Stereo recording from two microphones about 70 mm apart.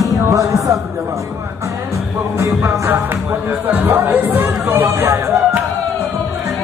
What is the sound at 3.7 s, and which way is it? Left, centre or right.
Music, right.